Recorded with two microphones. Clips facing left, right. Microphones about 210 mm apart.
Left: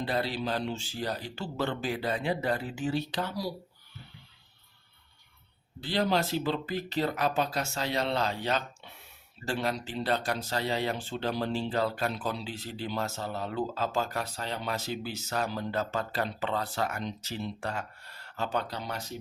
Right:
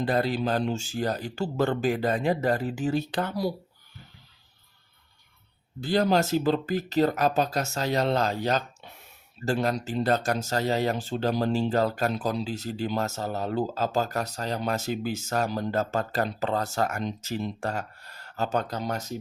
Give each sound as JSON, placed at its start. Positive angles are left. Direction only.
{"t": 0.0, "sound": "speech", "side_deg": -45}
{"t": 5.8, "sound": "speech", "side_deg": -45}